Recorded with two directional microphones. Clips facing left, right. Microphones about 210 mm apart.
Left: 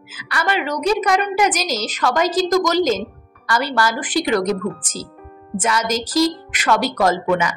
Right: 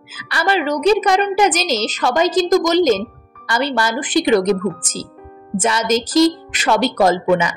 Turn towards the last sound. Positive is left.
turn(degrees=-25)  # may be behind; listen again after turning